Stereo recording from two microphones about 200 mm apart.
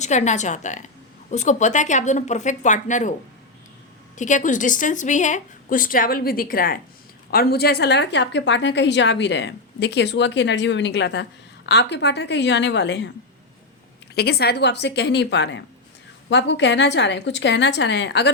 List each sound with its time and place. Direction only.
0.0 s a woman's voice: 35° left (ahead or behind)
4.2 s a woman's voice: 40° left (ahead or behind); by 13.1 s 60° left (ahead or behind)
14.2 s a woman's voice: 55° left (ahead or behind)